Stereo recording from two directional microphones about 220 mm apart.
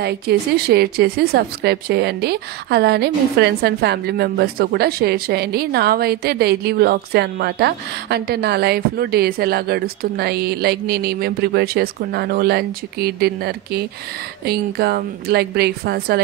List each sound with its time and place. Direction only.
0.0 s speech: 45° right (ahead or behind)